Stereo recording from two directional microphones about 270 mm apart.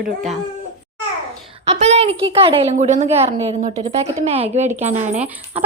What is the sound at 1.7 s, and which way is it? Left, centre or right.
A woman's voice, right.